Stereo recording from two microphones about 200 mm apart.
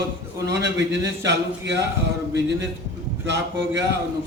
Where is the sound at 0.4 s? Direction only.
60° right (ahead or behind).